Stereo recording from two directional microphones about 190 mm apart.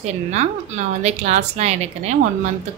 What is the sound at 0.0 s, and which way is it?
Speech, 35° right (ahead or behind).